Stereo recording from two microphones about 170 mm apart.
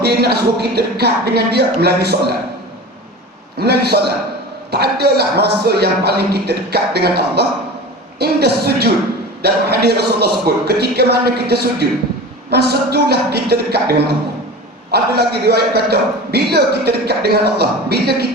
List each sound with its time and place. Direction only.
0.0 s a man's voice: 70° right (ahead or behind)
3.6 s a man's voice: 70° right (ahead or behind)